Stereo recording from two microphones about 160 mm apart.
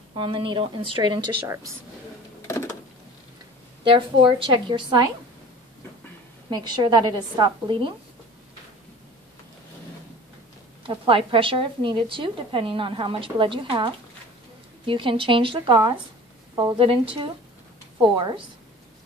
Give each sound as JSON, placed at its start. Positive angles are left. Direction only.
{"t": 0.1, "sound": "a woman's voice", "side_deg": -35}
{"t": 3.8, "sound": "a woman's voice", "side_deg": -30}
{"t": 6.5, "sound": "a woman's voice", "side_deg": -25}
{"t": 10.8, "sound": "a woman's voice", "side_deg": -35}